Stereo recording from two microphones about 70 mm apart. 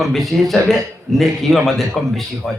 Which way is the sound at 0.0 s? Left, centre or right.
Centre.